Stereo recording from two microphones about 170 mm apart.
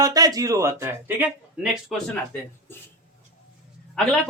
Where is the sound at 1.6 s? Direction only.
5° right (ahead or behind).